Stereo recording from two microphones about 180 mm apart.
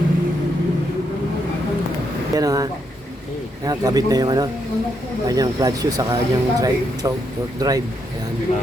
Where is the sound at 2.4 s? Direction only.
20° right (ahead or behind).